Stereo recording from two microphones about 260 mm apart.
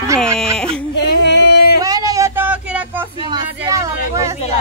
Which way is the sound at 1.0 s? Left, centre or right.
Left.